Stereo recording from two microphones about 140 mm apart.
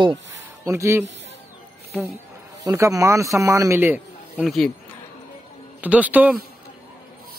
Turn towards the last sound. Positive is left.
turn(degrees=-10)  # may be behind; listen again after turning